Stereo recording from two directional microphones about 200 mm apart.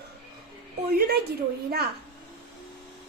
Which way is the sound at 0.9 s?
50° right (ahead or behind).